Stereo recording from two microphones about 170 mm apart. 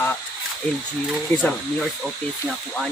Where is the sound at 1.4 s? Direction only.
Centre (ahead or behind).